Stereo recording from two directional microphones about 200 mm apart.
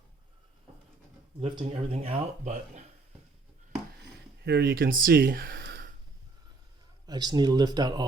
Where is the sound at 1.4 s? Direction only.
25° right (ahead or behind).